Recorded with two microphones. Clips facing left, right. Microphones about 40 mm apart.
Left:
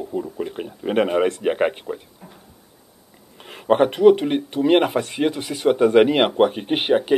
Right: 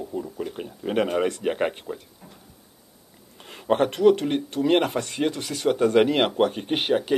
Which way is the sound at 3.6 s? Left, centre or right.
Centre.